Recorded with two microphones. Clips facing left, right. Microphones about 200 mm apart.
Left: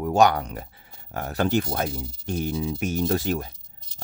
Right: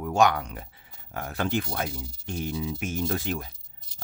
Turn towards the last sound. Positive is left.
turn(degrees=40)  # may be behind; listen again after turning